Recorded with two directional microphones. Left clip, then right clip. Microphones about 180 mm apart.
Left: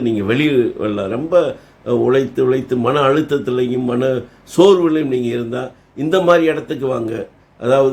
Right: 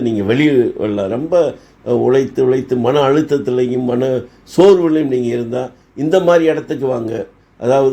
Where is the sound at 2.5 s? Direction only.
15° right (ahead or behind).